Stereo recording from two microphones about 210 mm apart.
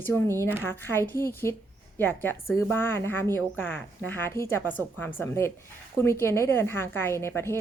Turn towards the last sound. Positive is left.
turn(degrees=10)  # may be behind; listen again after turning